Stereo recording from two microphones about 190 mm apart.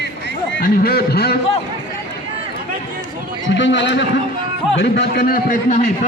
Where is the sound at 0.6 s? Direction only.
50° left (ahead or behind).